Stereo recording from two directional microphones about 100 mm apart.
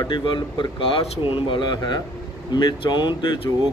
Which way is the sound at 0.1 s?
55° left (ahead or behind).